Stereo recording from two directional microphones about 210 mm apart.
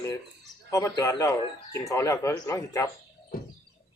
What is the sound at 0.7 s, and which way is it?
Speech, 15° left (ahead or behind).